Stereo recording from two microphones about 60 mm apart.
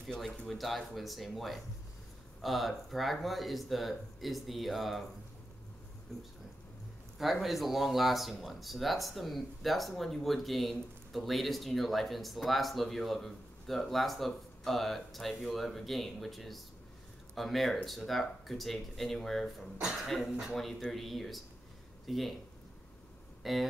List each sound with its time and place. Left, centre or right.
0.2 s speech: centre
7.4 s speech: centre
23.4 s speech: centre